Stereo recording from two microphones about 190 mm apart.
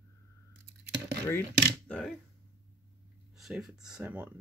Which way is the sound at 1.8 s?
5° left (ahead or behind).